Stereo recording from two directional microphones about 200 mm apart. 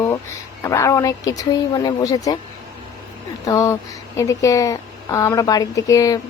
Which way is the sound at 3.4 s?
15° left (ahead or behind).